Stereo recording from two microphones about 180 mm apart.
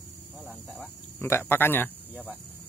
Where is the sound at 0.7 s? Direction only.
10° left (ahead or behind).